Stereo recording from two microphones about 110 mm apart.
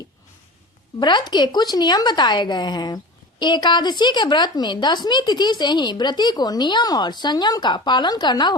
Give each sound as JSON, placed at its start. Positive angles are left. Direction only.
{"t": 0.9, "sound": "speech", "side_deg": 45}